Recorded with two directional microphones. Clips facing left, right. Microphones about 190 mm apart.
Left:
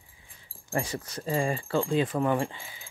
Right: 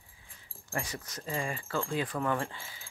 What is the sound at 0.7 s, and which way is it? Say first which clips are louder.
Speech: left 6 dB; 30° left (ahead or behind).